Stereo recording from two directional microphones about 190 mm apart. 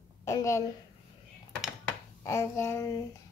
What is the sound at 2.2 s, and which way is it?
Speech, 15° left (ahead or behind).